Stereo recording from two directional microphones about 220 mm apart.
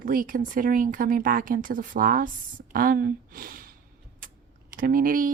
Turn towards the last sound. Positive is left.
turn(degrees=-40)  # may be behind; listen again after turning